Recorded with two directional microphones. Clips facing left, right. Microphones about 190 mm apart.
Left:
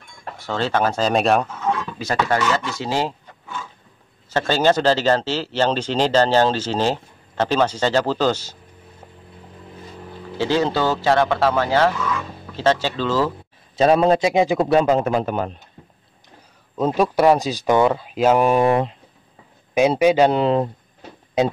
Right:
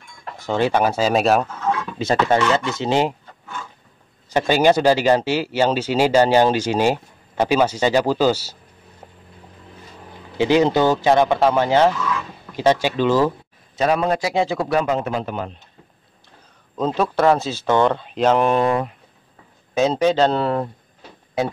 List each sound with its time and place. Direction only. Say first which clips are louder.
0.5 s speech: right 3 dB; 15° right (ahead or behind)
1.7 s a sound: even; 5° right (ahead or behind)
2.0 s speech: right 6 dB; 25° right (ahead or behind)
4.3 s speech: right 2 dB; 15° right (ahead or behind)
10.3 s speech: right 4 dB; 15° right (ahead or behind)
13.7 s a man's voice: left 4 dB; 30° left (ahead or behind)
15.0 s a man's voice: left 4 dB; 45° left (ahead or behind)
16.7 s a man's voice: left 2 dB; 10° left (ahead or behind)